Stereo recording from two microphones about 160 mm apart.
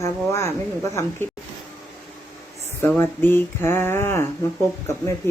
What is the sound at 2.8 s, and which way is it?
Speech, 15° left (ahead or behind).